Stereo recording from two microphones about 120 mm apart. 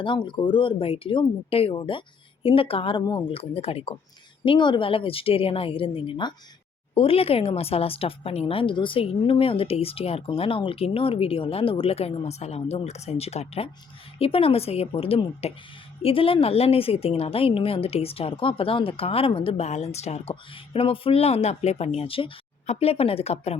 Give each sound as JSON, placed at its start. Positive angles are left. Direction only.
{"t": 0.0, "sound": "speech", "side_deg": 45}
{"t": 4.4, "sound": "speech", "side_deg": 40}
{"t": 20.7, "sound": "speech", "side_deg": 50}